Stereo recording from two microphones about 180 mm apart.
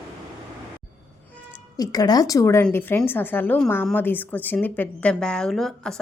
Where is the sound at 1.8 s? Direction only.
20° left (ahead or behind); by 5.9 s centre (ahead or behind).